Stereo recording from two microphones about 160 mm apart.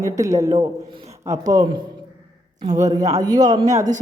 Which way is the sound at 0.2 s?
20° right (ahead or behind).